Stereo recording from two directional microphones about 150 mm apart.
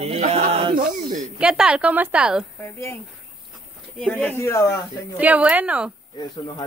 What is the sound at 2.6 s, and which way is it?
Speech, 20° left (ahead or behind).